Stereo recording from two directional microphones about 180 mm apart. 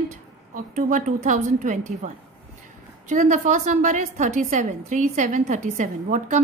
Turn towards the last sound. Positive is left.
turn(degrees=-45)  # may be behind; listen again after turning